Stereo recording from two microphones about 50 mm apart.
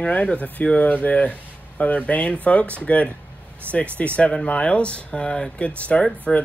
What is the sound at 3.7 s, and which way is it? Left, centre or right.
Speech, right.